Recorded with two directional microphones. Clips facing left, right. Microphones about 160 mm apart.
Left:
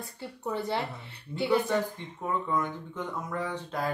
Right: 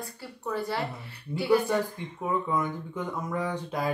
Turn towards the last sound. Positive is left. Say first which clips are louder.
# right 2 dB
turn(degrees=-10)  # may be behind; listen again after turning